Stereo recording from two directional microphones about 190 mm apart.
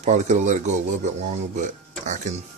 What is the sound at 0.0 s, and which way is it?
Speech, 40° right (ahead or behind).